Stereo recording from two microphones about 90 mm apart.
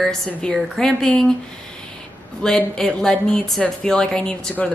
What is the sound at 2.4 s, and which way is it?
A woman's voice, 5° left (ahead or behind).